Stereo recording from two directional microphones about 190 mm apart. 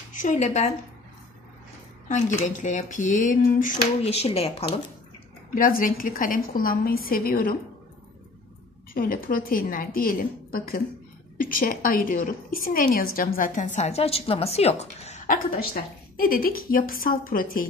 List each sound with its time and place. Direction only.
0.1 s a woman's voice: 40° left (ahead or behind)
2.0 s speech: 40° left (ahead or behind)
5.5 s a woman's voice: 45° left (ahead or behind)
8.9 s a woman's voice: 50° left (ahead or behind)